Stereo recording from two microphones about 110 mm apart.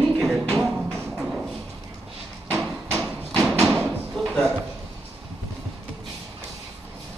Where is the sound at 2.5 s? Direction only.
15° left (ahead or behind).